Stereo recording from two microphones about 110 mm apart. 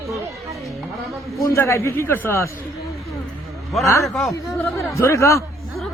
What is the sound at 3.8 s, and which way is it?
Speech, 30° left (ahead or behind).